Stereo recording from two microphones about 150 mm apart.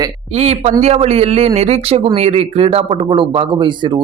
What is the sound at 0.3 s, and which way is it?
A man's voice, 45° right (ahead or behind).